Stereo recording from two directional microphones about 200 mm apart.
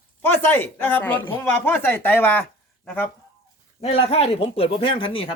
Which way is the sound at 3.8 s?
30° left (ahead or behind).